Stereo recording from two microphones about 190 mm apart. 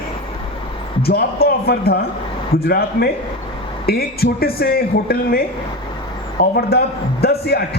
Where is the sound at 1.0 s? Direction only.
55° left (ahead or behind).